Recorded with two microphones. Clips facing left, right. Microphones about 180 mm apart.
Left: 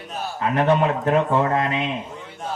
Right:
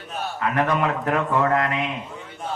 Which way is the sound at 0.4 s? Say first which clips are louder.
Left 3 dB; 25° left (ahead or behind).